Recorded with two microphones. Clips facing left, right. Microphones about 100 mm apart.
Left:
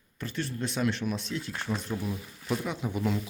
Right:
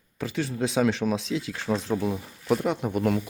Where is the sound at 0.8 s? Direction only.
90° right; by 3.2 s 55° right (ahead or behind).